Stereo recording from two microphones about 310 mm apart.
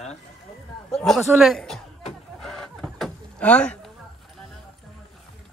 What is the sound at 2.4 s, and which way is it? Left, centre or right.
Chicken, centre.